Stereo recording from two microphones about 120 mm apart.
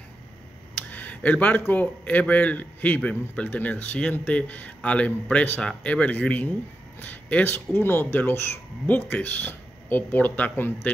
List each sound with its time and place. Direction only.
0.7 s speech: 15° left (ahead or behind)